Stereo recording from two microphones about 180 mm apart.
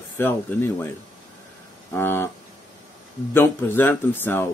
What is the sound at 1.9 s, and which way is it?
Speech, 15° left (ahead or behind).